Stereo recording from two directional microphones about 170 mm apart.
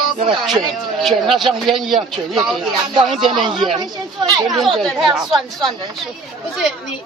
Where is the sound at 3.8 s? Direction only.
25° right (ahead or behind).